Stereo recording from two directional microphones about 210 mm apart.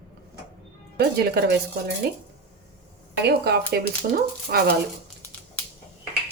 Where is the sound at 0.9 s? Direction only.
50° right (ahead or behind).